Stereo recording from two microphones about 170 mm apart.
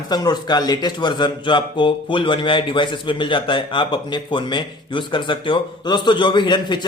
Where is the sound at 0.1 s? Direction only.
25° left (ahead or behind).